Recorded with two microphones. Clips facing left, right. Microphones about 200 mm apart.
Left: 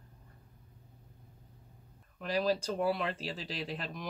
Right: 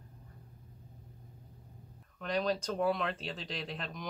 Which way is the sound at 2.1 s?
5° left (ahead or behind).